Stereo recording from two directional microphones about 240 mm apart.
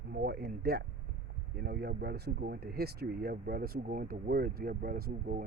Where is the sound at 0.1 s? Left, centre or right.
Right.